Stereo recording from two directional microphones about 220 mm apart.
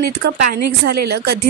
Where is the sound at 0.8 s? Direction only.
50° right (ahead or behind).